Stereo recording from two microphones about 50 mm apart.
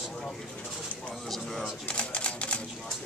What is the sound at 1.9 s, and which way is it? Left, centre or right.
Typewriter, left.